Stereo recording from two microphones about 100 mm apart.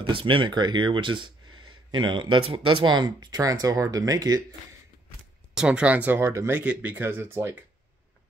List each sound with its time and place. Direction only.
0.0 s speech: 60° right (ahead or behind); by 4.4 s 35° right (ahead or behind)
5.5 s speech: 10° right (ahead or behind); by 6.6 s 25° right (ahead or behind)
6.6 s speech: 15° right (ahead or behind)